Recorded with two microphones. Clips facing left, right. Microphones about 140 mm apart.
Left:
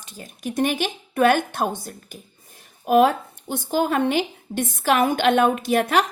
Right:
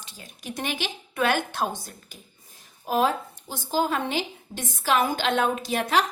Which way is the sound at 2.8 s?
60° left (ahead or behind).